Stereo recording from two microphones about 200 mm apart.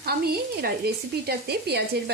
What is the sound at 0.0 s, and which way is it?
Speech, 50° right (ahead or behind).